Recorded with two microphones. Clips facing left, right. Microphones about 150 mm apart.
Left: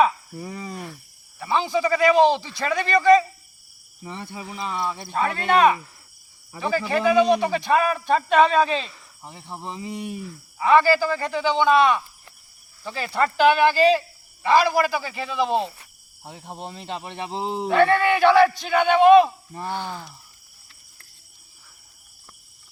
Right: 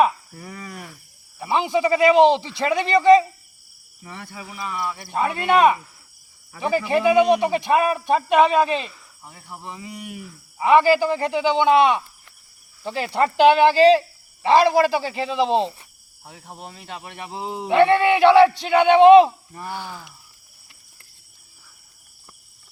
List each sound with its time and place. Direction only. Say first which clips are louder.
0.3 s speech: left 3 dB; 25° left (ahead or behind)
1.4 s speech: right 2 dB; 15° right (ahead or behind)
4.0 s speech: left 3 dB; 20° left (ahead or behind)
5.1 s a man's voice: right 2 dB; 10° right (ahead or behind)
9.2 s speech: left 2 dB; 25° left (ahead or behind)
10.6 s a man's voice: right 2 dB; 15° right (ahead or behind)
16.2 s speech: left 3 dB; 25° left (ahead or behind)
17.7 s speech: right 3 dB; 20° right (ahead or behind)
19.6 s a man's voice: left 3 dB; 5° right (ahead or behind)